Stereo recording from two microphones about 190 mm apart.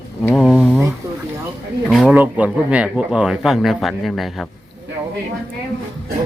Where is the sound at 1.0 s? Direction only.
15° right (ahead or behind).